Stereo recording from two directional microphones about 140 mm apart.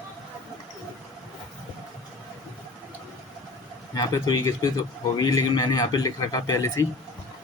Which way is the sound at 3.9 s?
25° left (ahead or behind).